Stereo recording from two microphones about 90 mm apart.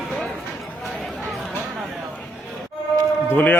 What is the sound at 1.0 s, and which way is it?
Chatter, centre (ahead or behind).